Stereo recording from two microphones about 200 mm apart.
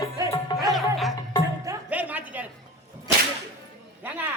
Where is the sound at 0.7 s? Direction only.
Centre (ahead or behind).